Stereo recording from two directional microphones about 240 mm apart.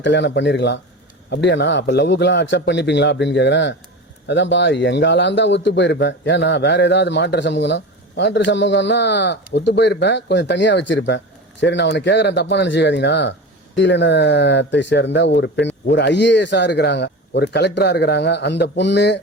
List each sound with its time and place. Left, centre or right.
0.0 s a man's voice: left